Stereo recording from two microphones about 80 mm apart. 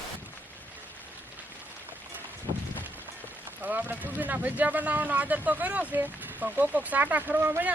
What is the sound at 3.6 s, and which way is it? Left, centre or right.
Speech, right.